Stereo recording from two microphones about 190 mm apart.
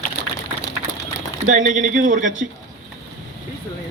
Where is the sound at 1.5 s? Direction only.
45° right (ahead or behind).